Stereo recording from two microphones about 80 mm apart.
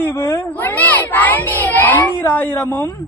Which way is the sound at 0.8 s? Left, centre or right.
Left.